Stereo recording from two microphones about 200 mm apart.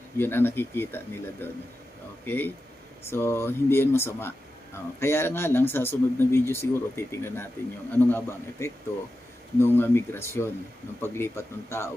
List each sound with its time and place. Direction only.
0.2 s speech: 10° left (ahead or behind)